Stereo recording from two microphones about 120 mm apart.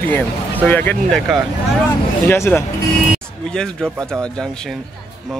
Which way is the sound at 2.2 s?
20° left (ahead or behind).